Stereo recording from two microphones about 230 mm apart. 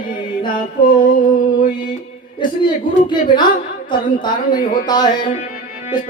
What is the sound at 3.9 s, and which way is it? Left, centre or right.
Speech, centre.